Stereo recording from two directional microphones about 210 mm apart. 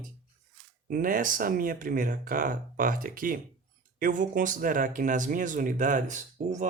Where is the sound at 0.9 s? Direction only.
40° right (ahead or behind).